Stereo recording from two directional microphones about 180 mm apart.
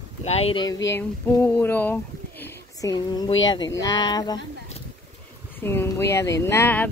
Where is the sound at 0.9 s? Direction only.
15° left (ahead or behind).